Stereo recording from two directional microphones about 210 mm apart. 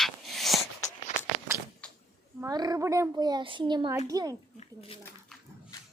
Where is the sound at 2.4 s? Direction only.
20° right (ahead or behind).